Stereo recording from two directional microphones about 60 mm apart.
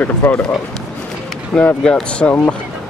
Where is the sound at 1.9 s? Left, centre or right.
Left.